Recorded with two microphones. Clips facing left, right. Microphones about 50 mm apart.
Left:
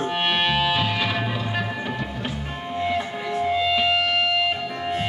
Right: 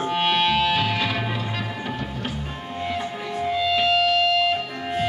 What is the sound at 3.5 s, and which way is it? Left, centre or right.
Music, left.